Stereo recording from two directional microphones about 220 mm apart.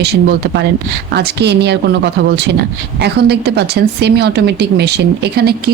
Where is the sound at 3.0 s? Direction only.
50° right (ahead or behind).